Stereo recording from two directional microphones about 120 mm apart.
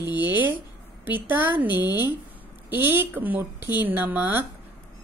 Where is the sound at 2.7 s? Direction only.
15° right (ahead or behind).